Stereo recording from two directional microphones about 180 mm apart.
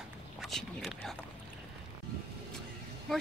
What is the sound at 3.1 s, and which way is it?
Speech, centre (ahead or behind).